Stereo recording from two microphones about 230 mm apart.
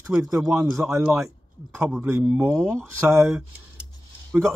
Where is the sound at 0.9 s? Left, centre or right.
Centre.